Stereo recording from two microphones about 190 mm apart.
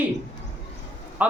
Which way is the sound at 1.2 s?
10° right (ahead or behind).